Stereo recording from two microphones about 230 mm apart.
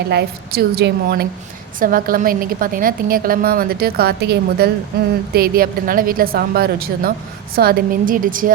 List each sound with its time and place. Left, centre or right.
0.1 s a woman's voice: right